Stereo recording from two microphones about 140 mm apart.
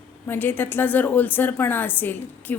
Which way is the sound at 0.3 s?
15° left (ahead or behind).